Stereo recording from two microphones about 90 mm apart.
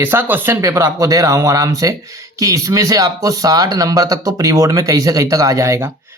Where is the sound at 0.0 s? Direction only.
25° right (ahead or behind).